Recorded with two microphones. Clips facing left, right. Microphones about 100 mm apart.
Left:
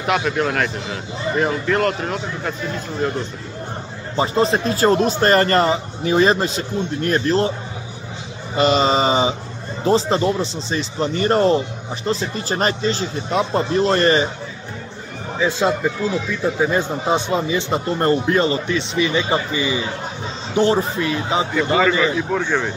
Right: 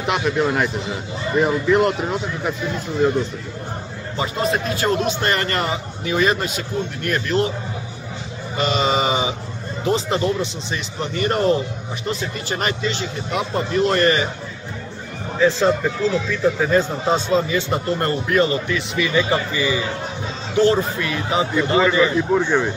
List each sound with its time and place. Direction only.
0.0 s speech: centre (ahead or behind)
4.2 s speech: 30° left (ahead or behind)
8.5 s speech: 35° left (ahead or behind)
15.3 s speech: 15° left (ahead or behind)
22.3 s speech: 10° right (ahead or behind)